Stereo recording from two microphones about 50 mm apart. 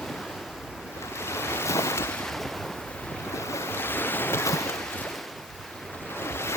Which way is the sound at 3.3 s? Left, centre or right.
Left.